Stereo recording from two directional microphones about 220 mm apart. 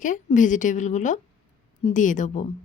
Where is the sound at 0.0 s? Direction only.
35° left (ahead or behind).